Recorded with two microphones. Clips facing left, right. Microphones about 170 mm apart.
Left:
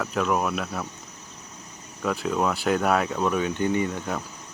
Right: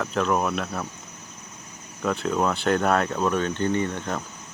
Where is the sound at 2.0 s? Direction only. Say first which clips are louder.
Right 1 dB; centre (ahead or behind).